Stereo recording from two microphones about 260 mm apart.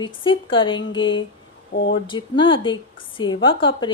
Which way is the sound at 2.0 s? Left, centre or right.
Centre.